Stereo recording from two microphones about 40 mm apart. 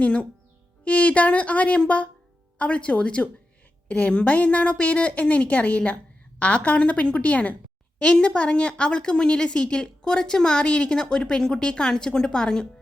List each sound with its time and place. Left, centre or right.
0.0 s a woman's voice: left
8.0 s a woman's voice: left